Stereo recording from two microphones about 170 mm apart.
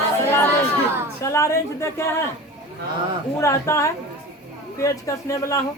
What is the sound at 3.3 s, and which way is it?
Speech, 15° left (ahead or behind).